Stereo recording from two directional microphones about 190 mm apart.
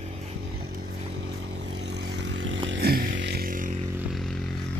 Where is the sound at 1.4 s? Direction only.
65° right (ahead or behind).